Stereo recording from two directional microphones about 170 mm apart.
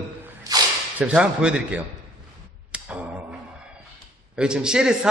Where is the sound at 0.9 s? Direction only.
5° right (ahead or behind).